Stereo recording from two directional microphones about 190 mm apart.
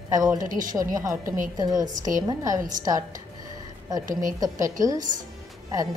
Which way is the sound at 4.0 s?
45° right (ahead or behind).